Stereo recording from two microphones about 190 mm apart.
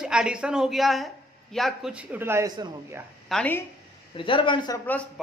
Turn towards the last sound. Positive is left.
turn(degrees=5)  # may be behind; listen again after turning